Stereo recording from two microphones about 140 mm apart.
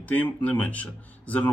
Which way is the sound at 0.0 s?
10° left (ahead or behind).